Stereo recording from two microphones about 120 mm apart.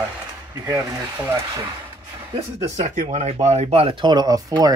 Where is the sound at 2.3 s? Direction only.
70° right (ahead or behind).